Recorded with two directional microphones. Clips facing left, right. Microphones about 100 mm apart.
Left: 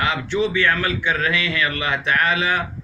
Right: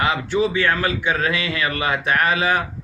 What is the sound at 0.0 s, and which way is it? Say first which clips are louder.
Speech: right 1 dB; 30° right (ahead or behind).